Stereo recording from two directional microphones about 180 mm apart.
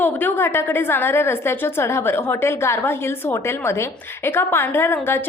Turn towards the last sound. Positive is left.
turn(degrees=10)  # may be behind; listen again after turning